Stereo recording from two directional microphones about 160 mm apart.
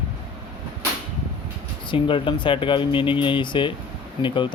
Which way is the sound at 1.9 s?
30° left (ahead or behind).